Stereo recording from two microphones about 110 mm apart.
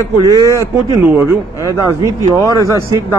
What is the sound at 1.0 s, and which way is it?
Speech, 20° right (ahead or behind).